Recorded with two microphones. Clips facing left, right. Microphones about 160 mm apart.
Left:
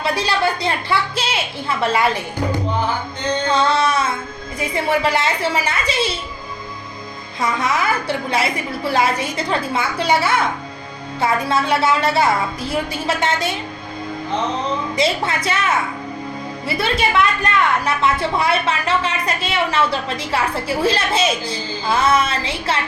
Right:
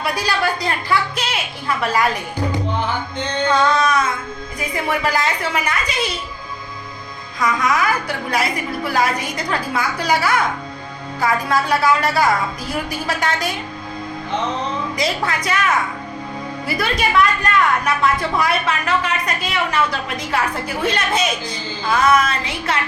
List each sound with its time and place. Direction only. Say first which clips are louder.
0.0 s a woman's voice: left 2 dB; 25° left (ahead or behind)
3.5 s a woman's voice: right 1 dB; 30° left (ahead or behind)
7.3 s a woman's voice: right 1 dB; 25° left (ahead or behind)
14.9 s a woman's voice: left 3 dB; 25° left (ahead or behind)